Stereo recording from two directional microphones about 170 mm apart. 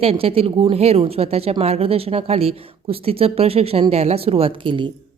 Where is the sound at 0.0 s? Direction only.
35° right (ahead or behind).